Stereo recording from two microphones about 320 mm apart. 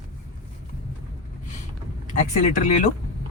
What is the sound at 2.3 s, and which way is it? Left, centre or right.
Speech, left.